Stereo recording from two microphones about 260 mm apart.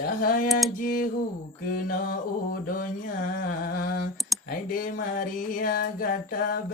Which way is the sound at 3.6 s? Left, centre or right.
Left.